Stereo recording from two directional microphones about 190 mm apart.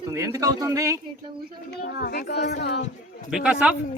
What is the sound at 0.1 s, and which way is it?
Speech, 15° right (ahead or behind).